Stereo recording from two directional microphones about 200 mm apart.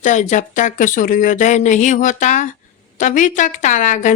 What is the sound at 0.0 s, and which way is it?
A woman's voice, 40° left (ahead or behind).